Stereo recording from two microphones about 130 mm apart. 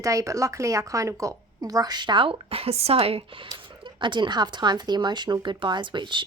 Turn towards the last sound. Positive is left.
turn(degrees=-40)  # may be behind; listen again after turning